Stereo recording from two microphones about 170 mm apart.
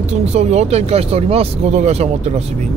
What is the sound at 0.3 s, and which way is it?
Speech, 40° right (ahead or behind).